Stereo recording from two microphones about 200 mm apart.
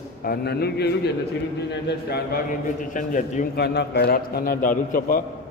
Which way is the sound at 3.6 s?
55° left (ahead or behind).